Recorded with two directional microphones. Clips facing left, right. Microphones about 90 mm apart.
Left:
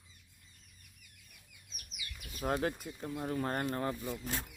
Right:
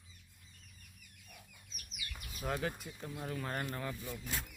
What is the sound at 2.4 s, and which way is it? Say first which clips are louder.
Speech: left 4 dB; 40° left (ahead or behind).